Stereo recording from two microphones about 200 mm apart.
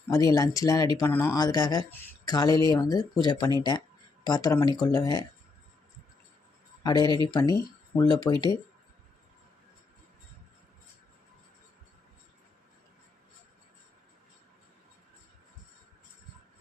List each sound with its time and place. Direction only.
0.1 s speech: 15° left (ahead or behind)
6.8 s speech: 20° left (ahead or behind)